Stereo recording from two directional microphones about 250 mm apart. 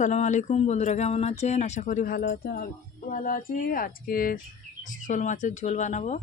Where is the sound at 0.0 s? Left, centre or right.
Left.